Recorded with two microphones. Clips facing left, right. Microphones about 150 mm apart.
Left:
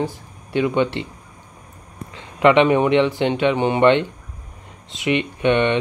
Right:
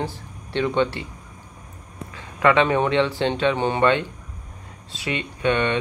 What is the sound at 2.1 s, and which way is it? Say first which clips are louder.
Speech: left 4 dB; 20° left (ahead or behind).